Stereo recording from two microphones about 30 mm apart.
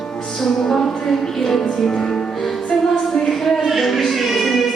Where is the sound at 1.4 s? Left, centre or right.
Centre.